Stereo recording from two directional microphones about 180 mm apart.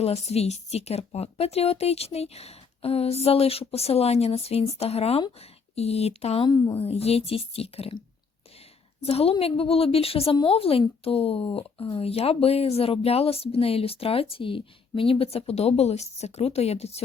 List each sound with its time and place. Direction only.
0.0 s a woman's voice: 35° left (ahead or behind)
6.5 s a woman's voice: 20° left (ahead or behind)
6.7 s a woman's voice: 35° left (ahead or behind)
9.0 s a woman's voice: 35° left (ahead or behind)